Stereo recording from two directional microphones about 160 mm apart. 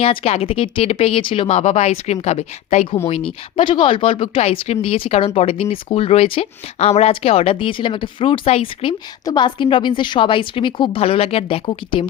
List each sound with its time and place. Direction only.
0.0 s speech: 35° left (ahead or behind)
3.6 s speech: 30° left (ahead or behind)